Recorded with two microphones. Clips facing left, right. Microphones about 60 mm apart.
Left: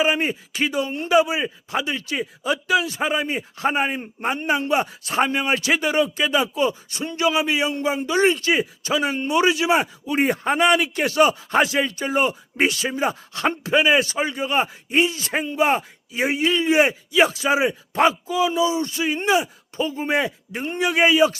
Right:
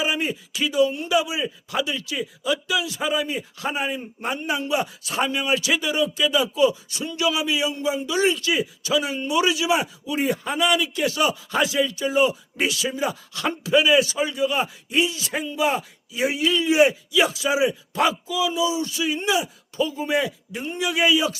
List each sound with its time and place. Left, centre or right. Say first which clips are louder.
0.0 s a man's voice: left 4 dB; left